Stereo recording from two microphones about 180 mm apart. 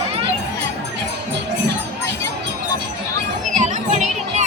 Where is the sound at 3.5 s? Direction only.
40° right (ahead or behind).